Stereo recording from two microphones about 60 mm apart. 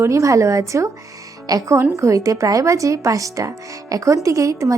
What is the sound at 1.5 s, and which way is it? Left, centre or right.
Speech, right.